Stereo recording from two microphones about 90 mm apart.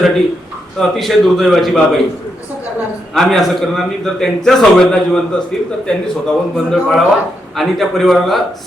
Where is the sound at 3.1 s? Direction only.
Centre (ahead or behind).